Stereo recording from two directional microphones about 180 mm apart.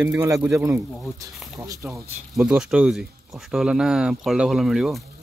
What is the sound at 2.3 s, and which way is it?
Speech, centre (ahead or behind).